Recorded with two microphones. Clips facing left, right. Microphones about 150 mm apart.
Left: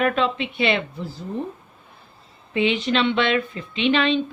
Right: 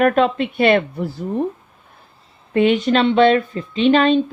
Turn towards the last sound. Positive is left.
turn(degrees=-45)  # may be behind; listen again after turning